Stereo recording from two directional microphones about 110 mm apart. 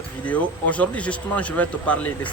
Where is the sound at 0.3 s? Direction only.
10° left (ahead or behind).